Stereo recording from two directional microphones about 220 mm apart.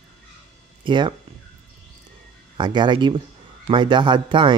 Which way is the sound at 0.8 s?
20° right (ahead or behind).